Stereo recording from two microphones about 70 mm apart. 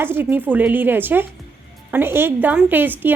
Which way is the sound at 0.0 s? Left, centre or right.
Right.